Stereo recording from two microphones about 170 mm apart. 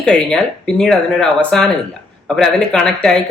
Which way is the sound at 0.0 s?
5° left (ahead or behind).